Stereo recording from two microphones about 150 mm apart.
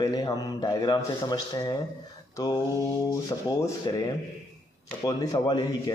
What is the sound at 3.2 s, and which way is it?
Speech, 25° left (ahead or behind).